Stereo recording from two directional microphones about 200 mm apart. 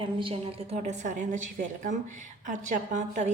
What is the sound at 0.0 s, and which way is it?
A woman's voice, 25° right (ahead or behind).